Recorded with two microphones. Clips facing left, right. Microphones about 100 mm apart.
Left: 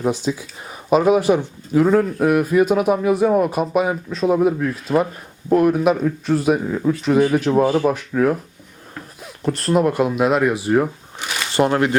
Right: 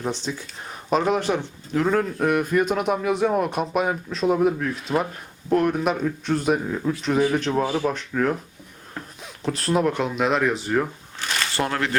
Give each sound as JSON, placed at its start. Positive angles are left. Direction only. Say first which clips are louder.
{"t": 0.0, "sound": "speech", "louder": "left 7 dB", "side_deg": 5}